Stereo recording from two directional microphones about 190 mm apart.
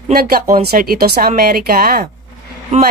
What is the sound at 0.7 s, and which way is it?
Speech, 50° right (ahead or behind).